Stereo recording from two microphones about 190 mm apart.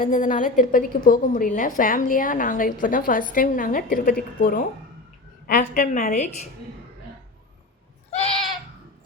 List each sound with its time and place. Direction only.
0.0 s a woman's voice: 45° left (ahead or behind)
8.1 s goat: 30° left (ahead or behind)